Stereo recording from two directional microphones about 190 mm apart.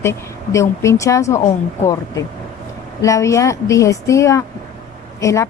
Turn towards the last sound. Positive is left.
turn(degrees=15)  # may be behind; listen again after turning